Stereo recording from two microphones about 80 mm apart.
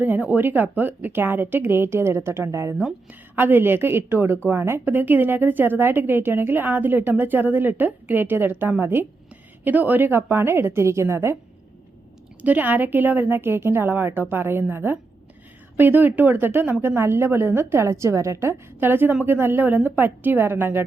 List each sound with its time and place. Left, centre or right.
0.0 s a woman's voice: right
12.4 s a woman's voice: right